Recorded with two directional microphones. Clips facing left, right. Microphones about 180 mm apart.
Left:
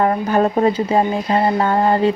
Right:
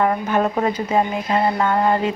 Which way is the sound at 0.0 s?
35° left (ahead or behind).